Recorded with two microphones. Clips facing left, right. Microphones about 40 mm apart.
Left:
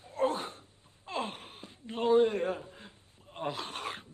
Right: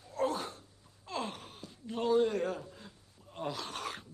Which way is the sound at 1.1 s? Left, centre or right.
Left.